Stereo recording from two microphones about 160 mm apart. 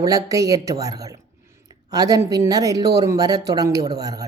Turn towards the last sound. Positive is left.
turn(degrees=-25)  # may be behind; listen again after turning